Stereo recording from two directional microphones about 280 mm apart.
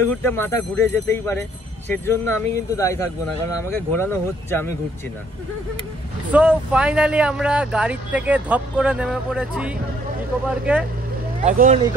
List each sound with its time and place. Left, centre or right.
0.0 s speech: centre
6.3 s speech: centre
11.4 s speech: right